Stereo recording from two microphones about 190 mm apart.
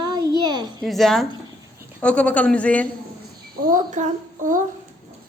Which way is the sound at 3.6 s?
40° right (ahead or behind).